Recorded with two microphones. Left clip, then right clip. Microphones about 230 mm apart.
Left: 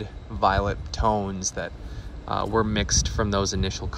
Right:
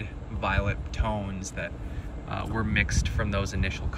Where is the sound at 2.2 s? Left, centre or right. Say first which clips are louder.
Left 9 dB; centre.